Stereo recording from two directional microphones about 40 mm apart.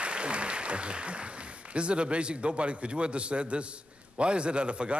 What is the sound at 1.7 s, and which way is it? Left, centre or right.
A man's voice, right.